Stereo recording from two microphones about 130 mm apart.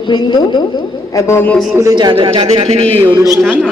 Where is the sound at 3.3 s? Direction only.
Centre (ahead or behind).